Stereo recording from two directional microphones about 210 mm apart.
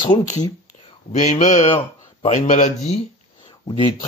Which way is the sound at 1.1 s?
35° left (ahead or behind).